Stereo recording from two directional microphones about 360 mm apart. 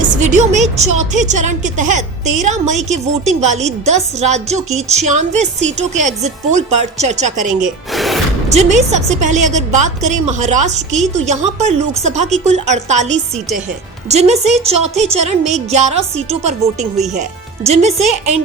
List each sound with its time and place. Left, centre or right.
0.0 s a woman's voice: centre
7.9 s music: centre
8.5 s a woman's voice: centre